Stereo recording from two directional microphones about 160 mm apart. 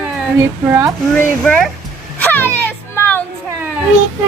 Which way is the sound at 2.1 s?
10° left (ahead or behind).